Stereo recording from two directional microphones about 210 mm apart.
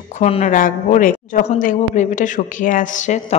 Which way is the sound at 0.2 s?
30° left (ahead or behind).